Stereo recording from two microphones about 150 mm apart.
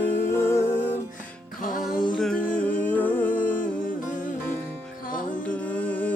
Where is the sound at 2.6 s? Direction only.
10° left (ahead or behind).